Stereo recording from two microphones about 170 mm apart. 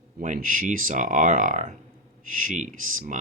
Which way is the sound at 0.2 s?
50° right (ahead or behind).